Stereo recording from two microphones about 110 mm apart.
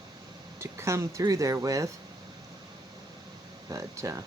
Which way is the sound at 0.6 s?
25° right (ahead or behind).